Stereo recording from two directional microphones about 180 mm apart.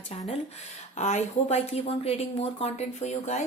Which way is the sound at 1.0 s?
40° left (ahead or behind).